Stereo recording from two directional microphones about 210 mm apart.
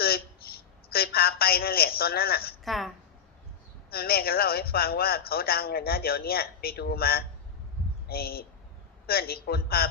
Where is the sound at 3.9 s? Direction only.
45° left (ahead or behind).